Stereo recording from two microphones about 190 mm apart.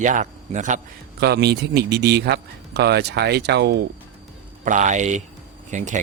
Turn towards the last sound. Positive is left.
turn(degrees=-40)  # may be behind; listen again after turning